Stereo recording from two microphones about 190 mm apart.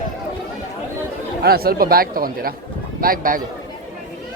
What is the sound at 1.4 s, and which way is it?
Speech, 55° right (ahead or behind).